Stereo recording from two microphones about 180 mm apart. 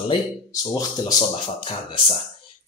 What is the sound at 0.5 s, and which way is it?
Speech, 20° left (ahead or behind).